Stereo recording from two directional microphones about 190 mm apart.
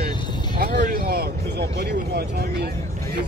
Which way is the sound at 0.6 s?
55° right (ahead or behind).